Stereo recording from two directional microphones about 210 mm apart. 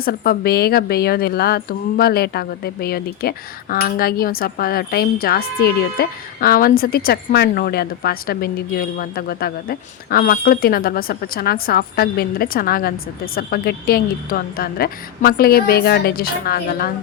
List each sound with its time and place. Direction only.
0.0 s a woman's voice: 45° left (ahead or behind)